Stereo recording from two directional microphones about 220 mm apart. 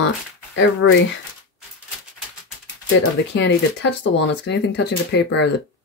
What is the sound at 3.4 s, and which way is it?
Speech, 55° left (ahead or behind).